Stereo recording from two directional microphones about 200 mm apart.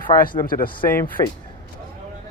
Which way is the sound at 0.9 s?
10° left (ahead or behind).